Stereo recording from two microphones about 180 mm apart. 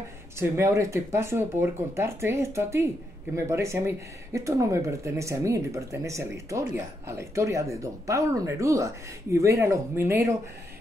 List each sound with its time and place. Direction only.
0.4 s speech: 15° right (ahead or behind)